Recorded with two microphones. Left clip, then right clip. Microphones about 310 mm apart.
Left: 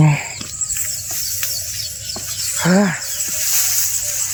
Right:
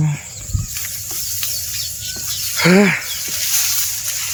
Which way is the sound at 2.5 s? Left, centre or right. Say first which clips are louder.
Right 4 dB; centre.